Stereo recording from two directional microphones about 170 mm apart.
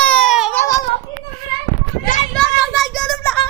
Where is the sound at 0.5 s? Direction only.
15° left (ahead or behind).